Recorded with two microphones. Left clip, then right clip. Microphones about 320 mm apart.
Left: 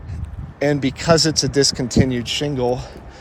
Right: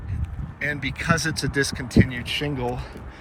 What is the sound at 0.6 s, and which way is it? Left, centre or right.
Speech, centre.